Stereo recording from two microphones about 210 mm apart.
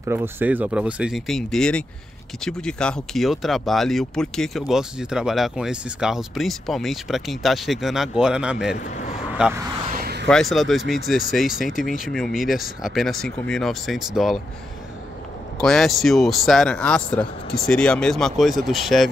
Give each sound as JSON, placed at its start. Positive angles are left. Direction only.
{"t": 0.0, "sound": "speech", "side_deg": -10}
{"t": 9.9, "sound": "a sound", "side_deg": -45}
{"t": 10.2, "sound": "speech", "side_deg": 0}
{"t": 15.6, "sound": "speech", "side_deg": 0}